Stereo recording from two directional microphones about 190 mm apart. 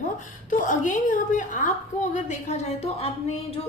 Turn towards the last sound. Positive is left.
turn(degrees=30)  # may be behind; listen again after turning